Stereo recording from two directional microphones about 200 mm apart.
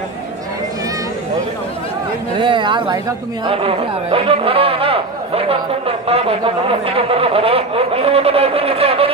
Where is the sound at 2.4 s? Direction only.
25° right (ahead or behind).